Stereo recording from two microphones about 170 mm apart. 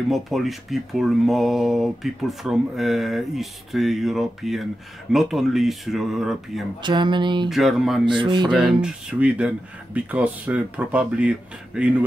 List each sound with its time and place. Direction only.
0.1 s speech: centre (ahead or behind)
6.8 s speech: 25° right (ahead or behind)
7.4 s speech: centre (ahead or behind)
8.1 s speech: 25° right (ahead or behind)
8.8 s speech: 5° right (ahead or behind)